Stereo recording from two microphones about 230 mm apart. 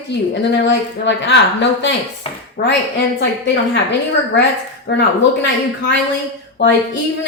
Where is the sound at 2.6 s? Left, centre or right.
Left.